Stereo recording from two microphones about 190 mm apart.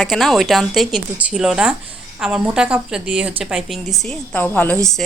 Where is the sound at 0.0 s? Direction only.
Centre (ahead or behind).